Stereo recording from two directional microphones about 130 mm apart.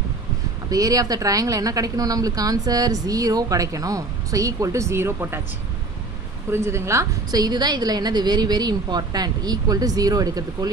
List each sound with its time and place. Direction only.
0.7 s speech: 25° right (ahead or behind)
6.5 s a woman's voice: 20° right (ahead or behind)